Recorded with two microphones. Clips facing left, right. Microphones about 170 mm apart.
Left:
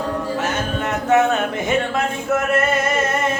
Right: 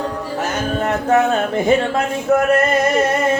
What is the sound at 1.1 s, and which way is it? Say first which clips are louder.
Speech: even; 35° right (ahead or behind).